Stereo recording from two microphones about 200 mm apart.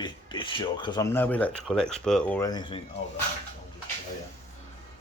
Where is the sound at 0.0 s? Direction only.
25° left (ahead or behind).